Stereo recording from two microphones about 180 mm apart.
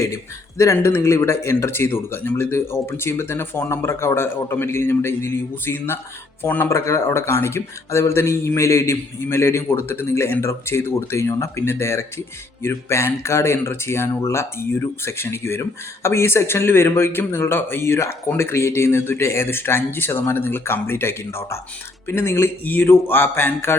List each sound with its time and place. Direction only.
0.0 s speech: 15° left (ahead or behind)